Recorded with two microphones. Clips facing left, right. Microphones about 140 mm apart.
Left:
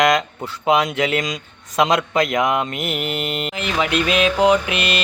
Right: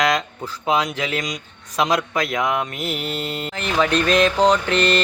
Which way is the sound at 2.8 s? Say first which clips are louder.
Left 2 dB; 55° left (ahead or behind).